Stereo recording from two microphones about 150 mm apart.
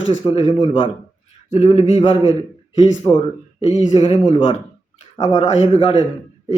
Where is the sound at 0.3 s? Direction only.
45° left (ahead or behind).